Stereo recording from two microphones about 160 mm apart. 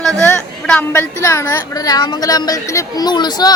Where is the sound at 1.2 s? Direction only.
15° left (ahead or behind).